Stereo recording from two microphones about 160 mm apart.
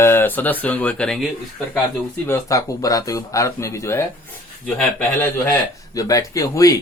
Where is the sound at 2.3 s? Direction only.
20° left (ahead or behind).